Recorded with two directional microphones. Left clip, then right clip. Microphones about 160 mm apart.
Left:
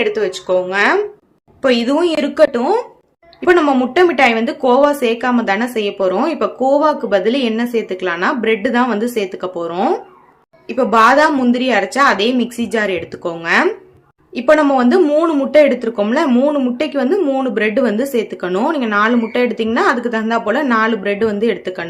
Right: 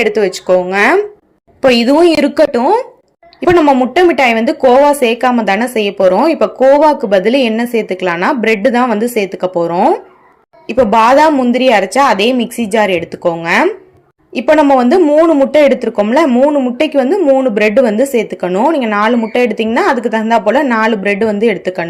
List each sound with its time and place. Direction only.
0.0 s a woman's voice: 30° right (ahead or behind)
3.4 s a woman's voice: 20° right (ahead or behind)
16.3 s a woman's voice: 10° right (ahead or behind)
16.7 s a woman's voice: 25° right (ahead or behind)